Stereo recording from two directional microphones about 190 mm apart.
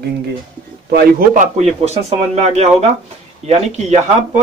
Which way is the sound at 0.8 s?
45° right (ahead or behind).